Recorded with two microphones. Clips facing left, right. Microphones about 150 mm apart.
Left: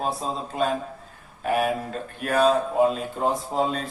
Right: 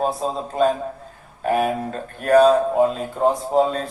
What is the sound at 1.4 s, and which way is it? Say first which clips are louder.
Speech: right 3 dB; 40° right (ahead or behind).